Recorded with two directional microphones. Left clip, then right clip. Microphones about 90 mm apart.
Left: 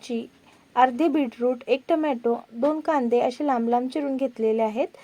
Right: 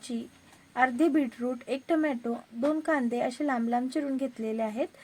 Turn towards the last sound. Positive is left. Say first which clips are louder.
# left 8 dB
turn(degrees=25)  # may be behind; listen again after turning